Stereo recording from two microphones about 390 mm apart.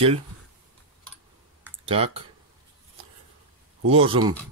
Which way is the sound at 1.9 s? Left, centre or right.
Centre.